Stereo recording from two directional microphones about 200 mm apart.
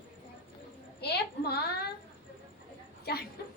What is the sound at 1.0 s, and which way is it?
Speech, 55° left (ahead or behind).